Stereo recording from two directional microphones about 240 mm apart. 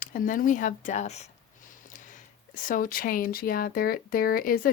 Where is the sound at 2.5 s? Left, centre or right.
Left.